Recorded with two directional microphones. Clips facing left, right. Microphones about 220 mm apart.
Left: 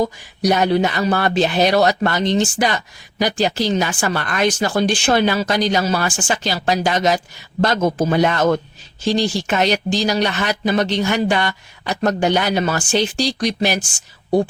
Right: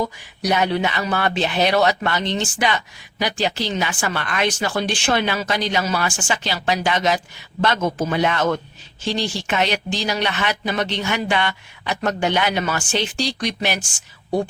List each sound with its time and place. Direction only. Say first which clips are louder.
0.0 s a man's voice: left 5 dB; 40° left (ahead or behind)